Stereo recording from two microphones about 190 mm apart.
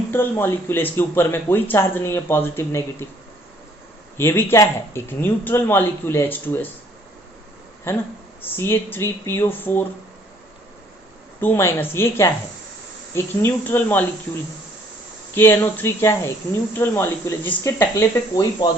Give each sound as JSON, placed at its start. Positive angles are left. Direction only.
{"t": 0.1, "sound": "speech", "side_deg": 10}
{"t": 4.2, "sound": "speech", "side_deg": 10}
{"t": 7.9, "sound": "speech", "side_deg": 15}
{"t": 11.3, "sound": "speech", "side_deg": 10}
{"t": 15.4, "sound": "speech", "side_deg": 10}